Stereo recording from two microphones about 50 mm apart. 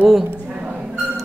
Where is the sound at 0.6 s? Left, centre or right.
Right.